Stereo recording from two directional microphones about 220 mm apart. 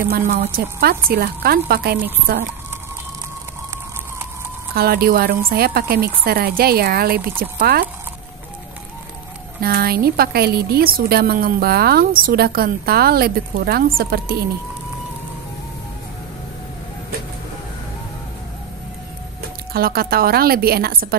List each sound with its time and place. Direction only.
0.3 s a woman's voice: 45° right (ahead or behind)
4.7 s a woman's voice: 45° right (ahead or behind)
9.6 s a woman's voice: 45° right (ahead or behind)
19.7 s a woman's voice: 45° right (ahead or behind)